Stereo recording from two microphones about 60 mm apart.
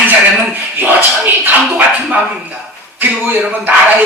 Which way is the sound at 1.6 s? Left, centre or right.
Right.